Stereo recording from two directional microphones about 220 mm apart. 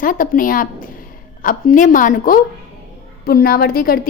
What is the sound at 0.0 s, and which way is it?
A woman's voice, 40° left (ahead or behind).